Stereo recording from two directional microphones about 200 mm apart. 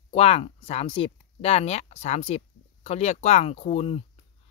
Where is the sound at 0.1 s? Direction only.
30° left (ahead or behind).